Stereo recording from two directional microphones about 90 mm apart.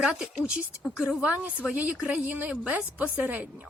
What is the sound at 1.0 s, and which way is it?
A woman's voice, 10° right (ahead or behind).